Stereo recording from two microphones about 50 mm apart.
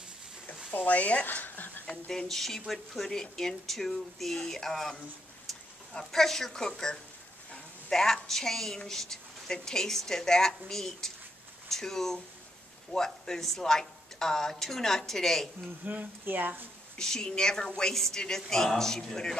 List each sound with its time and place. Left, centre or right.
0.7 s speech: left
1.9 s speech: centre
7.9 s speech: centre
15.8 s speech: right
16.9 s a woman's voice: centre